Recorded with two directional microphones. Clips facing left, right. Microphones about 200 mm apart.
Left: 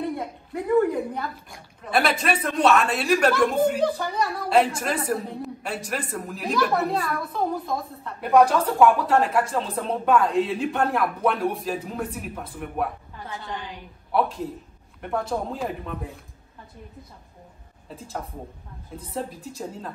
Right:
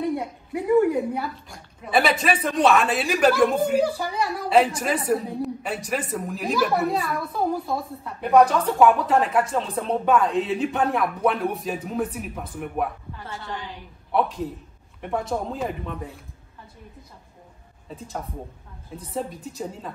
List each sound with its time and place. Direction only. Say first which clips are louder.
0.2 s a sound: right 1 dB; 10° right (ahead or behind)
1.9 s a woman's voice: right 2 dB; centre (ahead or behind)
13.3 s a woman's voice: even; 15° left (ahead or behind)
14.1 s a woman's voice: even; centre (ahead or behind)
17.8 s a woman's voice: right 1 dB; centre (ahead or behind)